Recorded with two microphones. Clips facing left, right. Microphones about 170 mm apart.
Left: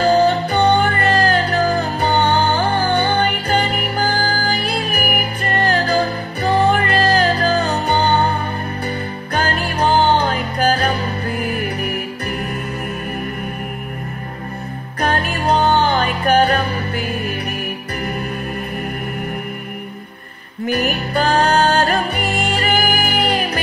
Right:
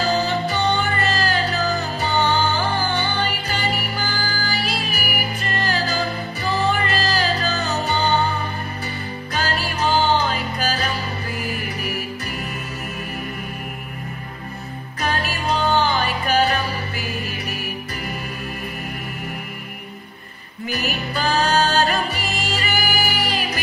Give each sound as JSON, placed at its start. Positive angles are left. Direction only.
{"t": 0.0, "sound": "music", "side_deg": 60}
{"t": 15.0, "sound": "music", "side_deg": 60}
{"t": 20.6, "sound": "music", "side_deg": 55}